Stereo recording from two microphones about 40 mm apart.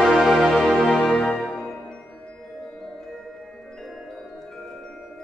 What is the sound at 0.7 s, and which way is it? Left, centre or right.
Music, centre.